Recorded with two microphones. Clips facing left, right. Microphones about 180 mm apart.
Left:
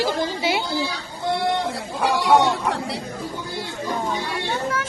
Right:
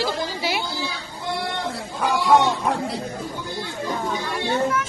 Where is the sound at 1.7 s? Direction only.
70° left (ahead or behind).